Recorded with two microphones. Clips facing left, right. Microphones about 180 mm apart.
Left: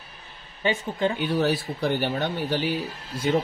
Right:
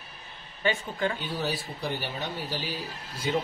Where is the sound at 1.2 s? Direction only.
65° left (ahead or behind).